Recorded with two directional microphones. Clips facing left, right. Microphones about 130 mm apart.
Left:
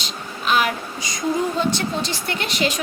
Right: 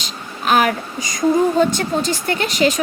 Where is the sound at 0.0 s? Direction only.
45° right (ahead or behind).